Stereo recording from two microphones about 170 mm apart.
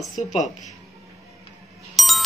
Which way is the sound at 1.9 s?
Centre (ahead or behind).